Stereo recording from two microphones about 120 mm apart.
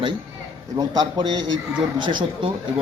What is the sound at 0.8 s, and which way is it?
A man's voice, 35° right (ahead or behind).